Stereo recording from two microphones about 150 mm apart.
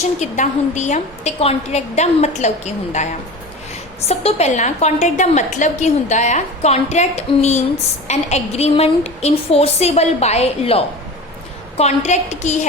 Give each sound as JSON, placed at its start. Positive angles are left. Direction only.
{"t": 0.2, "sound": "a woman's voice", "side_deg": 50}
{"t": 4.1, "sound": "a woman's voice", "side_deg": 45}